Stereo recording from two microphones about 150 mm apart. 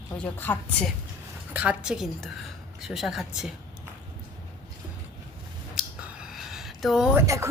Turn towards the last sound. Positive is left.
turn(degrees=-20)  # may be behind; listen again after turning